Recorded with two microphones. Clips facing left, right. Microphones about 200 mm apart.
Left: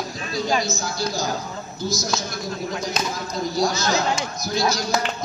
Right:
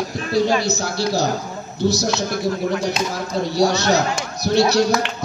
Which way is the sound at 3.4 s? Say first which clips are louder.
Right 5 dB; 70° right (ahead or behind).